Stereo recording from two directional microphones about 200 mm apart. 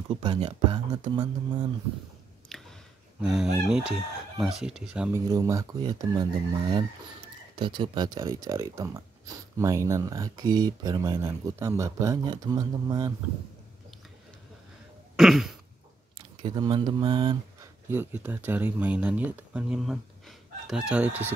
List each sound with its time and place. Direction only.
0.1 s speech: 30° right (ahead or behind)
2.5 s chewing: centre (ahead or behind)
3.2 s fowl: 5° right (ahead or behind)
3.5 s speech: 5° right (ahead or behind)
5.3 s speech: 15° right (ahead or behind)
15.1 s speech: centre (ahead or behind)
16.2 s speech: 25° right (ahead or behind)
17.8 s speech: 10° right (ahead or behind)